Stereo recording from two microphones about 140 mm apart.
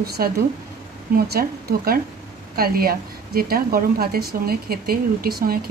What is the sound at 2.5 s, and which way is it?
Speech, 90° right.